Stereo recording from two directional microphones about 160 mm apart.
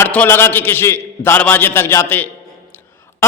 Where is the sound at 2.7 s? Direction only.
15° left (ahead or behind).